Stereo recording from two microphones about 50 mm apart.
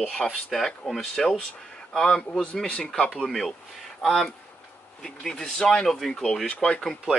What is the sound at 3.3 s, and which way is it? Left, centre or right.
Speech, centre.